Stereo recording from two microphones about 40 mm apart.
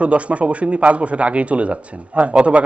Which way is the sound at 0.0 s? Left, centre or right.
Right.